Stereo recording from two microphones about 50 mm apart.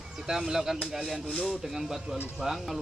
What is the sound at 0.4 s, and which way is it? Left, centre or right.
Speech, centre.